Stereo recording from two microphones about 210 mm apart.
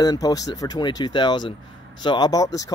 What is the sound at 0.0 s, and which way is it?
Speech, 20° left (ahead or behind).